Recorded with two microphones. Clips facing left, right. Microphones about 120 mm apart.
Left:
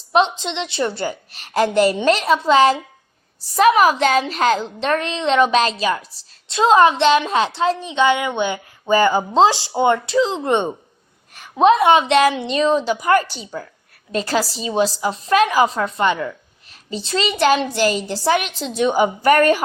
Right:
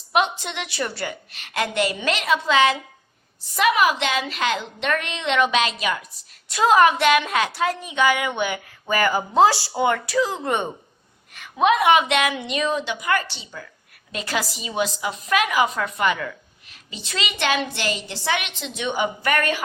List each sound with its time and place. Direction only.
0.1 s a woman's voice: 25° left (ahead or behind); by 19.6 s 40° left (ahead or behind)